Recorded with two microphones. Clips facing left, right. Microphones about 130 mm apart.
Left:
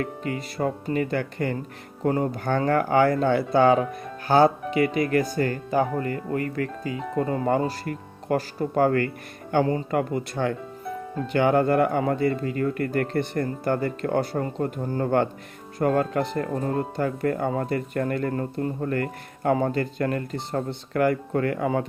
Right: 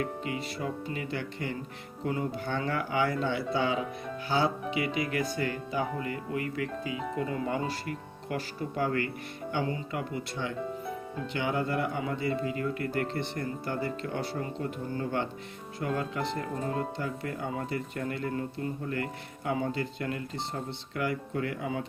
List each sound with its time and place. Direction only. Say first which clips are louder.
0.0 s speech: left 4 dB; 45° left (ahead or behind)